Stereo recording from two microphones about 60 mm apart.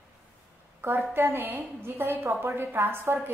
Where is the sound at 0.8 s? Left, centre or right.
Right.